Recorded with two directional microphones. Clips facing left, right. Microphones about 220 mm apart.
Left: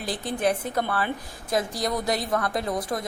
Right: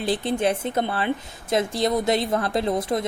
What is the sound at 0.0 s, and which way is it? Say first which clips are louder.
A woman's voice: right 4 dB; 25° right (ahead or behind).